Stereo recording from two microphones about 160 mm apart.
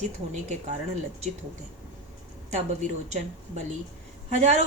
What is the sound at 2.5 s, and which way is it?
Speech, 45° right (ahead or behind).